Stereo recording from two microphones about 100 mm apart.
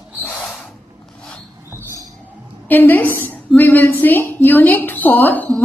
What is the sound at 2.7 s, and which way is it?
A woman's voice, 20° left (ahead or behind).